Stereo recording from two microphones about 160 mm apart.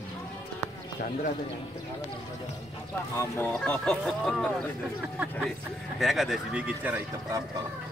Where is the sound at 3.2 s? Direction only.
10° left (ahead or behind).